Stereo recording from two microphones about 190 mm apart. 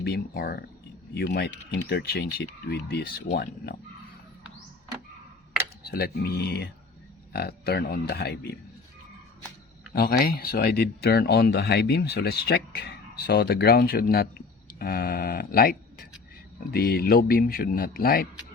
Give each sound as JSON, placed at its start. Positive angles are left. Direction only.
{"t": 0.0, "sound": "speech", "side_deg": 55}
{"t": 5.8, "sound": "speech", "side_deg": 55}
{"t": 9.9, "sound": "a man's voice", "side_deg": 50}